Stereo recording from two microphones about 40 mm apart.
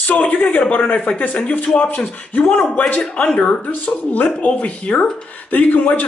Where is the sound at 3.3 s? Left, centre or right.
Left.